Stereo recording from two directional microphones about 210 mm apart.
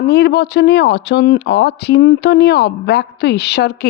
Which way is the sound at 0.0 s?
50° left (ahead or behind).